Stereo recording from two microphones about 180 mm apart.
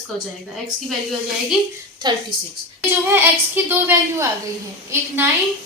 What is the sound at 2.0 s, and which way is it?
Speech, 25° right (ahead or behind).